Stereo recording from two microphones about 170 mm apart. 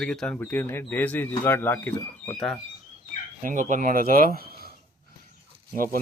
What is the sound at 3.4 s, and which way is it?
Speech, 45° right (ahead or behind).